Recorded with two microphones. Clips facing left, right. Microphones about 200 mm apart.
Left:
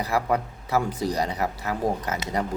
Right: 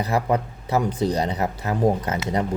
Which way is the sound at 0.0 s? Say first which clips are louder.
Right 2 dB; 20° right (ahead or behind).